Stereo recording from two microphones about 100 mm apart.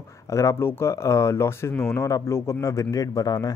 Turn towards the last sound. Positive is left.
turn(degrees=40)  # may be behind; listen again after turning